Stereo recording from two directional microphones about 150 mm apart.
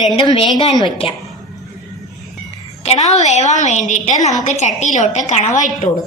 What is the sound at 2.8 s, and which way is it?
A woman's voice, 45° left (ahead or behind).